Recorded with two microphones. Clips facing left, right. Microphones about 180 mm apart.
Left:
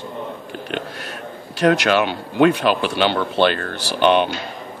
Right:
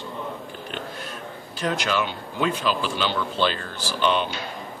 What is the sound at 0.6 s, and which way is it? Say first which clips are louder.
Speech: left 7 dB; 70° left (ahead or behind).